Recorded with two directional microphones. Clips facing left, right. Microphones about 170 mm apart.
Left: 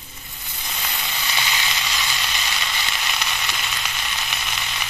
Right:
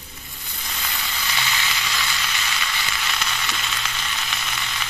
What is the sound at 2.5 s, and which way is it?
Frying, 15° left (ahead or behind).